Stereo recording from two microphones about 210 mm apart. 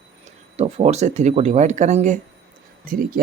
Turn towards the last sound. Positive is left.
turn(degrees=-40)  # may be behind; listen again after turning